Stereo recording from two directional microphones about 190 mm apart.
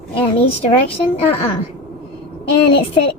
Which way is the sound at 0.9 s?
30° left (ahead or behind).